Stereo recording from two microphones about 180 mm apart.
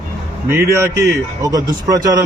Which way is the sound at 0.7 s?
15° right (ahead or behind).